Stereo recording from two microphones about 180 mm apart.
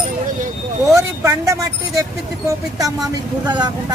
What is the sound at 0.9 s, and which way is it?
Speech, 15° right (ahead or behind).